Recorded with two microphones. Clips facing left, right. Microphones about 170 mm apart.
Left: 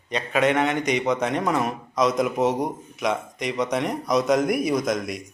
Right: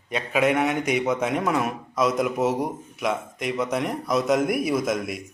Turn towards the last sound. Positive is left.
turn(degrees=-5)  # may be behind; listen again after turning